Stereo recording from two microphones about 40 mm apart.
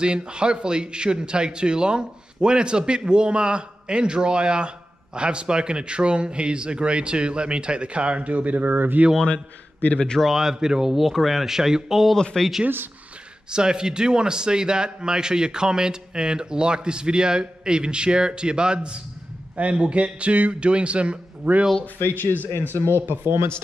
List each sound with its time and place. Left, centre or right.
0.0 s a man's voice: right
9.9 s a man's voice: left
10.2 s speech: centre
11.0 s speech: centre
12.4 s speech: centre
13.5 s a man's voice: right
21.9 s speech: left
22.6 s speech: left
23.0 s speech: right